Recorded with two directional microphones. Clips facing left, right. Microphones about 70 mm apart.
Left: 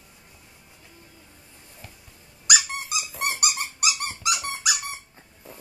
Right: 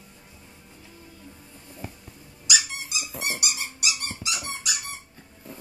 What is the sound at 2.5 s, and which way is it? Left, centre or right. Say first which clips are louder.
Squeak: left 3 dB; left.